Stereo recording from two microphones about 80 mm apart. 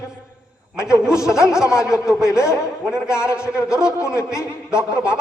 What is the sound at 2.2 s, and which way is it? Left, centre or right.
Speech, left.